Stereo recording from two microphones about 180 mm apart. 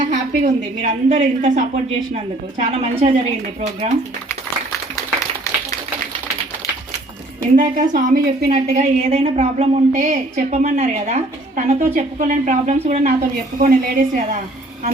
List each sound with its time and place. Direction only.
0.0 s a woman's voice: 40° right (ahead or behind)
7.5 s a woman's voice: 45° right (ahead or behind)
8.7 s a woman's voice: 40° right (ahead or behind)
13.6 s a woman's voice: 50° right (ahead or behind)